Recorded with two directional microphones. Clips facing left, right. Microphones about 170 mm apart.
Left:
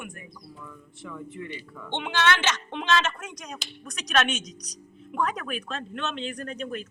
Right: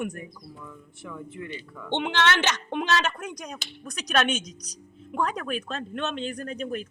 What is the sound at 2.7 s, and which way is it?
Speech, 45° right (ahead or behind).